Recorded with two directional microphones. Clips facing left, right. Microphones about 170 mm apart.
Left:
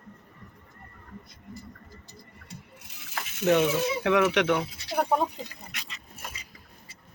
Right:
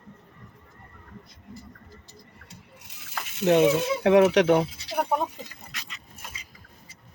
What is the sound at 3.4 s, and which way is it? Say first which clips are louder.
Speech: right 3 dB; 30° right (ahead or behind).